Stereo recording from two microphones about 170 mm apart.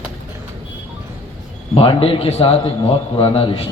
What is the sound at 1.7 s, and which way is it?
A man's voice, 35° left (ahead or behind).